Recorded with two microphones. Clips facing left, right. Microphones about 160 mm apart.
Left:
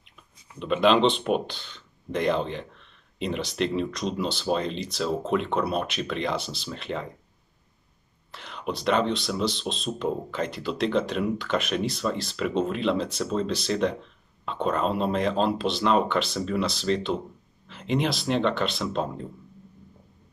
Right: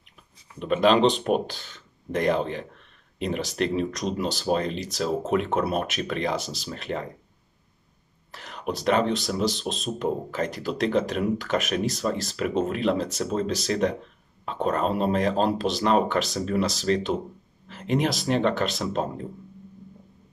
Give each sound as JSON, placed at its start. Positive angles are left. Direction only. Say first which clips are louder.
{"t": 0.6, "sound": "speech", "louder": "right 1 dB", "side_deg": -45}
{"t": 8.3, "sound": "speech", "louder": "right 1 dB", "side_deg": -45}